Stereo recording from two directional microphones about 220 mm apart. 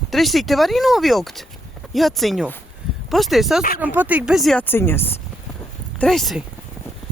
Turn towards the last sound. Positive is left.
turn(degrees=0)  # may be behind; listen again after turning